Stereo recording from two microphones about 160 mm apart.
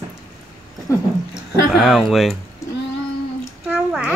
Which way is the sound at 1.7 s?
Centre (ahead or behind).